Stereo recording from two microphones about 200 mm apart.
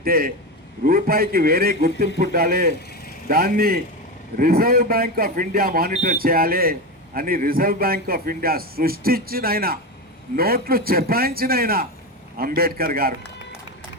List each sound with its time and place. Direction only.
0.0 s speech: 45° right (ahead or behind)